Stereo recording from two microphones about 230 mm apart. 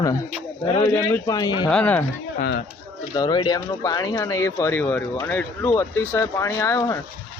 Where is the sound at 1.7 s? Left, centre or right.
Centre.